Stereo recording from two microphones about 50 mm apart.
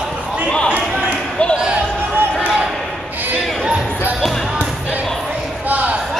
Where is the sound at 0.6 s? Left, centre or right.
Right.